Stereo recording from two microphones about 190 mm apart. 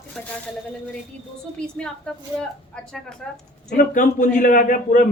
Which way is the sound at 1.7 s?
5° left (ahead or behind).